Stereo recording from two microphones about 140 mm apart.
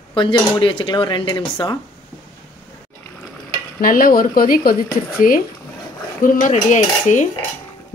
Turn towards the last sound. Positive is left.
turn(degrees=60)  # may be behind; listen again after turning